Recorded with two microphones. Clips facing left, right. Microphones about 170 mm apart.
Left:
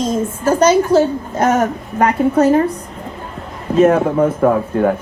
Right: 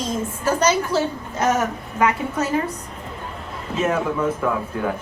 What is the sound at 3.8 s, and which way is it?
A woman's voice, 50° left (ahead or behind).